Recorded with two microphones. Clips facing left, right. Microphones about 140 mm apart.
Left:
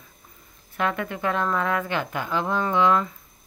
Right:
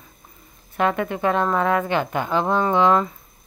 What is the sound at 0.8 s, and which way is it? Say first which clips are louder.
A woman's voice: right 5 dB; 25° right (ahead or behind).